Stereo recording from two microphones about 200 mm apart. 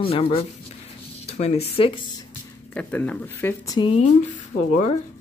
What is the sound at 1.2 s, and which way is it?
Speech, 30° left (ahead or behind).